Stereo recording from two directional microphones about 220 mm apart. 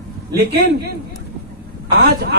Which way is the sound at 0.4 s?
45° right (ahead or behind).